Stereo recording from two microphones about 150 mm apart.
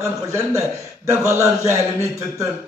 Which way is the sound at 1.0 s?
20° right (ahead or behind).